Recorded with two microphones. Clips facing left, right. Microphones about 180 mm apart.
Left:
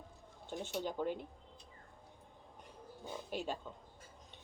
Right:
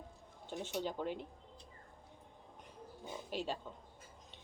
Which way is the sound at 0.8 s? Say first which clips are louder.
Left 1 dB; 10° left (ahead or behind).